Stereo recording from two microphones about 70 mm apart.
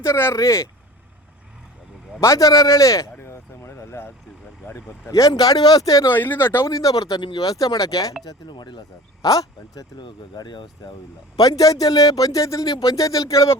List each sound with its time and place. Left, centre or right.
0.0 s speech: left
2.2 s speech: left
3.2 s a sound: left
4.7 s speech: left
5.2 s speech: left
6.1 s speech: left
6.7 s speech: left
8.2 s speech: left
9.2 s speech: left
10.3 s speech: left
11.3 s speech: left